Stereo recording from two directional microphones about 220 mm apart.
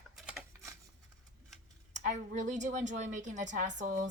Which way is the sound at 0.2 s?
Centre (ahead or behind).